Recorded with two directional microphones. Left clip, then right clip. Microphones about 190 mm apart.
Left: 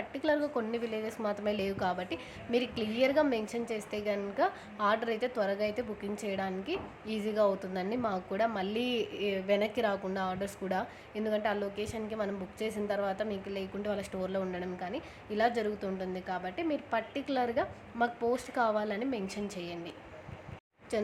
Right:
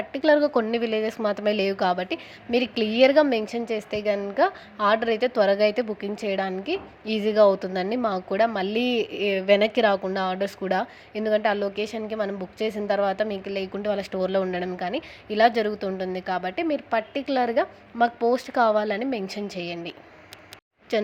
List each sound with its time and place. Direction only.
0.1 s a woman's voice: 30° right (ahead or behind)
20.9 s a woman's voice: 30° right (ahead or behind)